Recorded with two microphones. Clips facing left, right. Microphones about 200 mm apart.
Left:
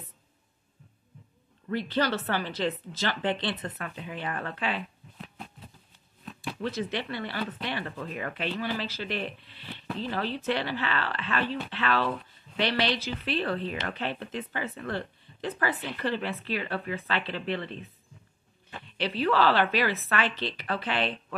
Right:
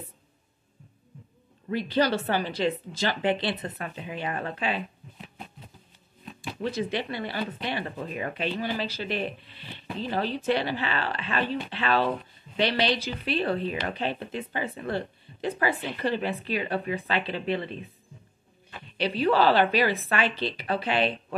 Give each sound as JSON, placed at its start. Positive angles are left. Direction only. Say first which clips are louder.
{"t": 1.7, "sound": "speech", "louder": "right 3 dB", "side_deg": -10}
{"t": 3.7, "sound": "speech", "louder": "right 2 dB", "side_deg": -25}
{"t": 6.6, "sound": "speech", "louder": "right 3 dB", "side_deg": -15}
{"t": 7.6, "sound": "speech", "louder": "right 2 dB", "side_deg": -25}
{"t": 12.5, "sound": "speech", "louder": "right 2 dB", "side_deg": -15}
{"t": 18.9, "sound": "speech", "louder": "right 3 dB", "side_deg": -15}